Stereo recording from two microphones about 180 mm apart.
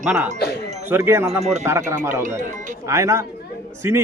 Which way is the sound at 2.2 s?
45° right (ahead or behind).